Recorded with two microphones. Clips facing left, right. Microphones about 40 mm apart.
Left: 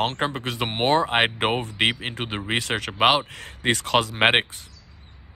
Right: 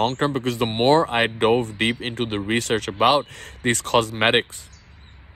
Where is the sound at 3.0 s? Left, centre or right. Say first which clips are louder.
Right 1 dB; left.